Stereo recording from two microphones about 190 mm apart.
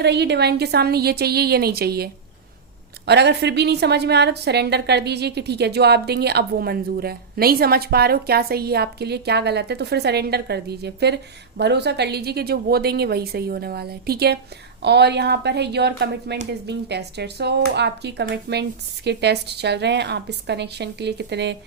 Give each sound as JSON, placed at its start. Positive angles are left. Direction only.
{"t": 0.0, "sound": "a woman's voice", "side_deg": -60}
{"t": 3.1, "sound": "a woman's voice", "side_deg": -60}